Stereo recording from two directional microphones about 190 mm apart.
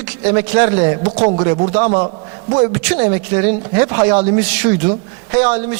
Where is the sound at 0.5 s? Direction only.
30° right (ahead or behind).